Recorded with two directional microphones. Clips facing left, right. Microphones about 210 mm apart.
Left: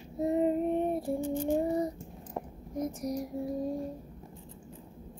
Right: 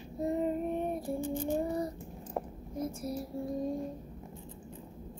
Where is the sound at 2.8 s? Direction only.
15° left (ahead or behind).